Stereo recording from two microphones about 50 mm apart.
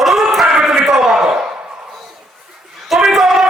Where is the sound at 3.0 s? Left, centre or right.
Centre.